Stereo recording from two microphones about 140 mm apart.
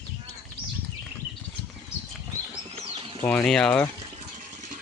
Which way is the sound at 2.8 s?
35° right (ahead or behind).